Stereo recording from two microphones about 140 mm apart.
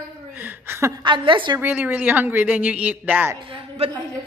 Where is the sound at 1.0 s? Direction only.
35° right (ahead or behind).